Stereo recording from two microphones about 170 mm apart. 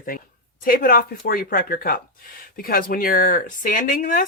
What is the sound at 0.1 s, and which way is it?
Speech, 55° left (ahead or behind).